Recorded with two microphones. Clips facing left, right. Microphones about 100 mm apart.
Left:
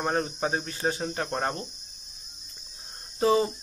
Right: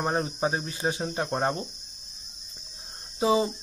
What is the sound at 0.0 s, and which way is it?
Speech, 10° right (ahead or behind).